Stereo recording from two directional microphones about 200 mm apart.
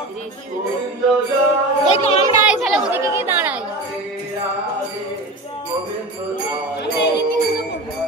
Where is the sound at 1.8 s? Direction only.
35° left (ahead or behind).